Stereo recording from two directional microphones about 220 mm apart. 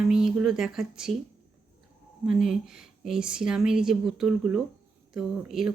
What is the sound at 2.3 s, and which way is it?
Speech, centre (ahead or behind).